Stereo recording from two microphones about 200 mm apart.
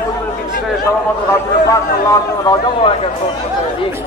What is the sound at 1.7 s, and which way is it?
A man's voice, 15° left (ahead or behind).